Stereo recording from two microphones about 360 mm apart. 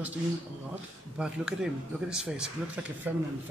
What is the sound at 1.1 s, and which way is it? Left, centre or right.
Speech, centre.